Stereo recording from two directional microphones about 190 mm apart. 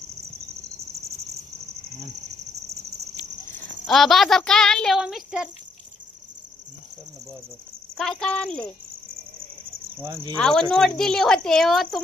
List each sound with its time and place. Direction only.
3.8 s a child's voice: centre (ahead or behind)
7.9 s a child's voice: centre (ahead or behind)
10.0 s speech: 15° right (ahead or behind)
10.3 s a child's voice: 5° left (ahead or behind)